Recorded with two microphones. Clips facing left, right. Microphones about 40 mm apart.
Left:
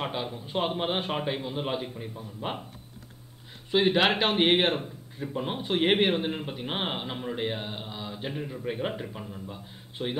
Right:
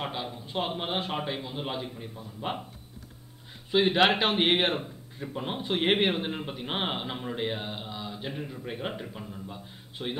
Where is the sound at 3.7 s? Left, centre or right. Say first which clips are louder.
Even; centre.